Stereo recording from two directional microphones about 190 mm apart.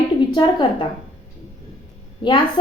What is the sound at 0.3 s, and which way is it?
Speech, 25° left (ahead or behind).